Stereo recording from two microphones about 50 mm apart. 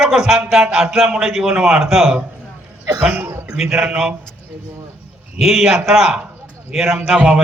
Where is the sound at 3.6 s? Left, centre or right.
Centre.